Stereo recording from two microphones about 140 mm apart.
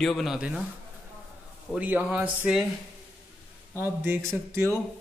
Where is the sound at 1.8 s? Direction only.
10° right (ahead or behind).